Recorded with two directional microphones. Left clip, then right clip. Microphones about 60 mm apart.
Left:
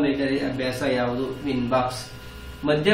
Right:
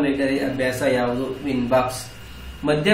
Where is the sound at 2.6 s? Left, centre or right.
Centre.